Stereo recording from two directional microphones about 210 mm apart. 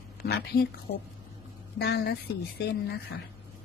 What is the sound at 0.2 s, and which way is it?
Speech, 50° left (ahead or behind).